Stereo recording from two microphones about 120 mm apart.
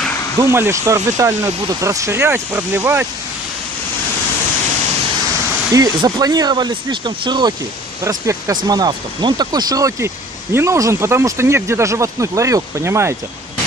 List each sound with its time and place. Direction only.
0.4 s speech: 20° right (ahead or behind)
6.0 s speech: 30° right (ahead or behind)
8.0 s speech: 25° right (ahead or behind)